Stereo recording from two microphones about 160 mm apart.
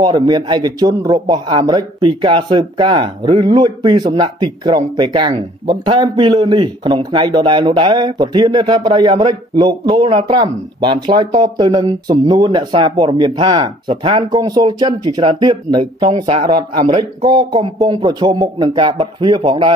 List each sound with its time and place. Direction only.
0.0 s speech: 25° right (ahead or behind)
9.9 s speech: 35° right (ahead or behind)